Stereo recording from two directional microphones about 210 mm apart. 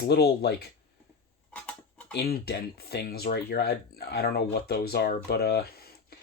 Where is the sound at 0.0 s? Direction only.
50° left (ahead or behind).